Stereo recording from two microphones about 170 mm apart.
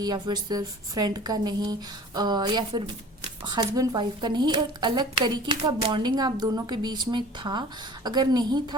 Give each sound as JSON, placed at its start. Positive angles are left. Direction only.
{"t": 0.0, "sound": "speech", "side_deg": -25}